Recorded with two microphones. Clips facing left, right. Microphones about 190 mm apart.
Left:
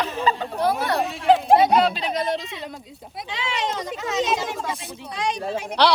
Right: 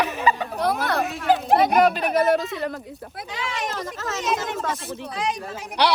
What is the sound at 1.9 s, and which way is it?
Speech, 60° right (ahead or behind).